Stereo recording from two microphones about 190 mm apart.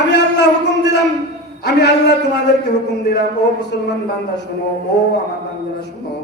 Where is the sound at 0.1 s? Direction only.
65° left (ahead or behind).